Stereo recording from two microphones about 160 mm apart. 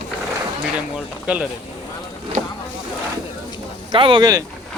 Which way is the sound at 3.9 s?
30° right (ahead or behind).